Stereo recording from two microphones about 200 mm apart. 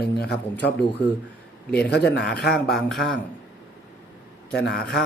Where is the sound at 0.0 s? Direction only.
55° left (ahead or behind).